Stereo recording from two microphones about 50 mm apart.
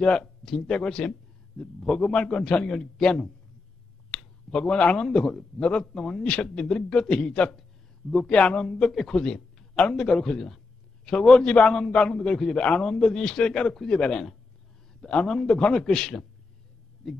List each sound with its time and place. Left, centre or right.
0.0 s a man's voice: centre